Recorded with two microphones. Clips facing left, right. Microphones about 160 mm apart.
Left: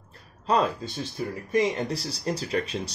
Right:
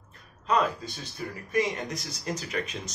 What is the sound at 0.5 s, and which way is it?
Speech, 30° left (ahead or behind).